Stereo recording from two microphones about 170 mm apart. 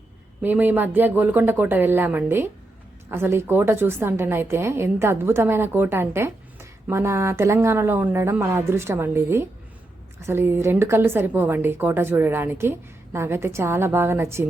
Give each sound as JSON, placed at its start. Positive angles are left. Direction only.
{"t": 0.4, "sound": "a woman's voice", "side_deg": -10}